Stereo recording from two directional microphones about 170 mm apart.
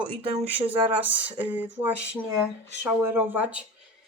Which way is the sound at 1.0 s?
10° right (ahead or behind).